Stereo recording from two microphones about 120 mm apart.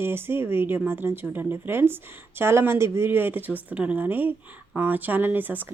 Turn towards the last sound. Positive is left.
turn(degrees=-15)  # may be behind; listen again after turning